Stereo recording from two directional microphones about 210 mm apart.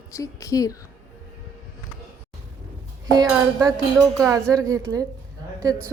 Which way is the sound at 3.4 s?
15° right (ahead or behind).